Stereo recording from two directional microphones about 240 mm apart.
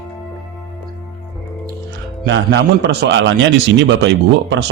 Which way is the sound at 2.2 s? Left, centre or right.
Right.